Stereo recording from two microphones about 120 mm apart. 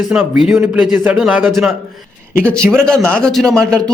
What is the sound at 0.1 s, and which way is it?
A man's voice, 5° right (ahead or behind).